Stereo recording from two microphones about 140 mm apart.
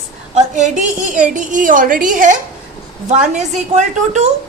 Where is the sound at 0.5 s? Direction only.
60° right (ahead or behind).